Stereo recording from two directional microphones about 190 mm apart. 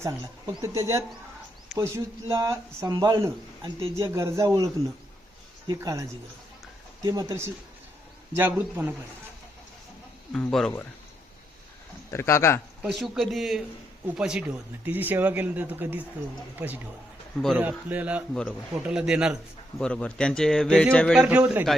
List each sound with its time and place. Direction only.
0.0 s speech: 20° right (ahead or behind)
10.3 s speech: 5° left (ahead or behind)
12.1 s speech: 15° left (ahead or behind)
12.8 s speech: centre (ahead or behind)
17.3 s speech: centre (ahead or behind)
17.6 s speech: 10° right (ahead or behind)